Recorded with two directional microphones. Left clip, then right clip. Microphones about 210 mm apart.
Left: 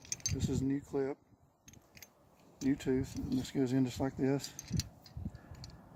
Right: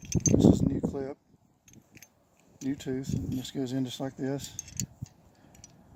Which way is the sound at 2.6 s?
20° right (ahead or behind).